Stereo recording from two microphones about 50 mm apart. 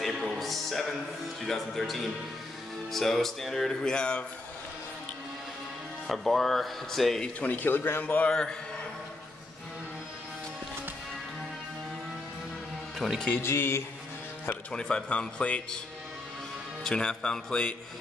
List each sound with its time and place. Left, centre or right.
0.0 s music: centre
1.4 s speech: centre
2.9 s music: centre
6.0 s speech: centre
7.3 s speech: left
8.0 s a man's voice: left
8.3 s music: centre
13.0 s speech: centre
13.4 s speech: left
14.7 s speech: centre
16.8 s music: centre